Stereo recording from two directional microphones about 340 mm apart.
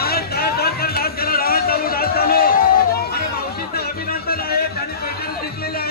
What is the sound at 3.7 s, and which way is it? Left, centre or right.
Music, left.